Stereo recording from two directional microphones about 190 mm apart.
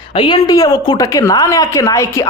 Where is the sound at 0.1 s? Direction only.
25° left (ahead or behind).